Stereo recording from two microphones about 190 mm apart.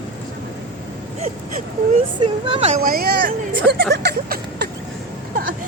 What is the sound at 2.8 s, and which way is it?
Hubbub, 50° right (ahead or behind).